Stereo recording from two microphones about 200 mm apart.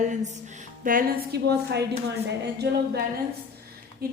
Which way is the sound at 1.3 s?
55° right (ahead or behind).